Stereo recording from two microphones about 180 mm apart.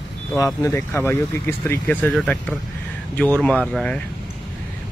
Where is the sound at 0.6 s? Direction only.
15° left (ahead or behind).